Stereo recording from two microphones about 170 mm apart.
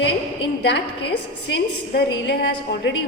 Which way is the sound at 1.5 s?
85° left.